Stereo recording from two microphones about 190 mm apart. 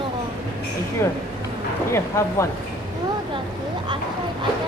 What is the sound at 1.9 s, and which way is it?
Speech, 15° left (ahead or behind).